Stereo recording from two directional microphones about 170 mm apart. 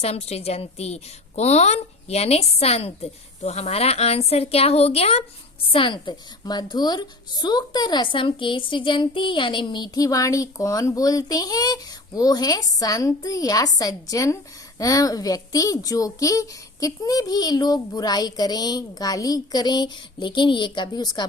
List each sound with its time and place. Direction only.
0.0 s a woman's voice: 35° left (ahead or behind)